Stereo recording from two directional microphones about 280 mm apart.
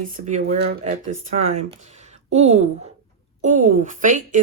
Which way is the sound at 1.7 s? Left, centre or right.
Right.